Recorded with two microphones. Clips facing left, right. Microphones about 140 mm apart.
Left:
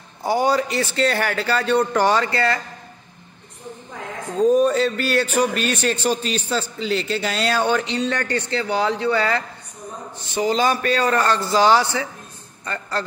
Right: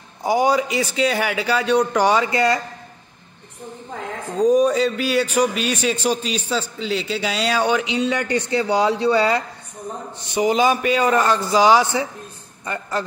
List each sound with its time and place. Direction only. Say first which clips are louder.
0.2 s a man's voice: right 1 dB; 15° right (ahead or behind)
4.4 s a man's voice: even; 15° right (ahead or behind)
4.6 s a man's voice: even; centre (ahead or behind)